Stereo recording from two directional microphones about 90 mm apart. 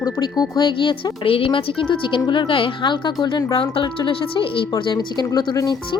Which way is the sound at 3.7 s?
75° left (ahead or behind).